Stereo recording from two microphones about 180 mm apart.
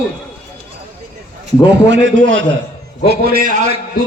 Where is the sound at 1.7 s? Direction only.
80° right.